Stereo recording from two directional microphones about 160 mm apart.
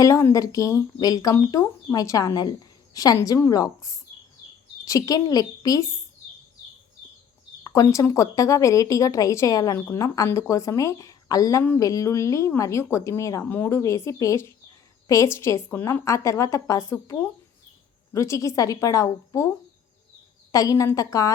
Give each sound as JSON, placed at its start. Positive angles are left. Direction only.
{"t": 0.0, "sound": "speech", "side_deg": 20}
{"t": 7.6, "sound": "speech", "side_deg": 20}
{"t": 20.5, "sound": "speech", "side_deg": 20}